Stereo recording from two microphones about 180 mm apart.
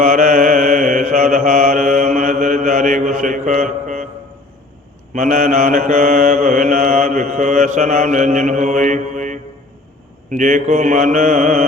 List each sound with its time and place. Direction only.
0.0 s mantra: 50° right (ahead or behind)
5.1 s mantra: 50° right (ahead or behind)